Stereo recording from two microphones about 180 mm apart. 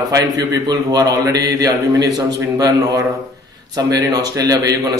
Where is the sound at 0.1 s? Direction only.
20° right (ahead or behind).